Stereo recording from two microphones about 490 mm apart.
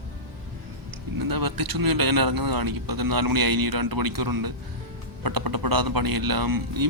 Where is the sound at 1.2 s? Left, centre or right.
Right.